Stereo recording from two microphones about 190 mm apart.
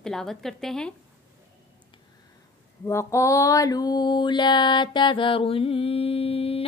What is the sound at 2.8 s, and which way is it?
Mantra, 15° left (ahead or behind).